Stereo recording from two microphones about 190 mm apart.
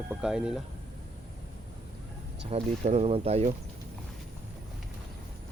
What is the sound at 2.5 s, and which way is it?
Speech, 35° right (ahead or behind).